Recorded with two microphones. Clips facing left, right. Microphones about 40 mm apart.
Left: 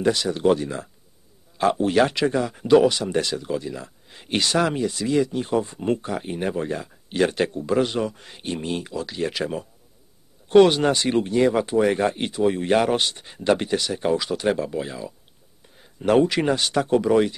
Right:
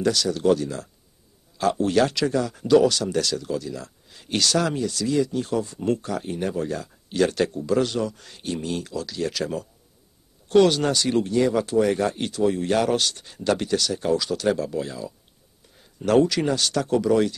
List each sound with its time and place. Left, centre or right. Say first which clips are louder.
0.0 s speech: left 1 dB; left